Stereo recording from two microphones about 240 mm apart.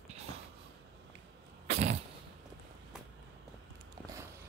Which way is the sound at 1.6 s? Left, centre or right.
Right.